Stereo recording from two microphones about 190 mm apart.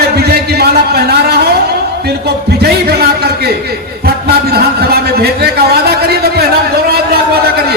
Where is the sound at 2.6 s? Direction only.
55° right (ahead or behind).